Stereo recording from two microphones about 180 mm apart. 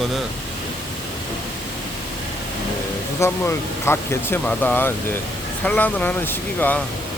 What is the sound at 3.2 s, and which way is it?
Speech, 15° left (ahead or behind).